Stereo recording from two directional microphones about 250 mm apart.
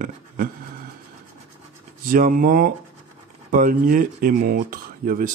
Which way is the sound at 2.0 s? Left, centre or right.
Right.